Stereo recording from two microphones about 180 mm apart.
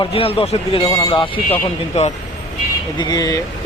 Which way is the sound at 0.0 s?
30° left (ahead or behind).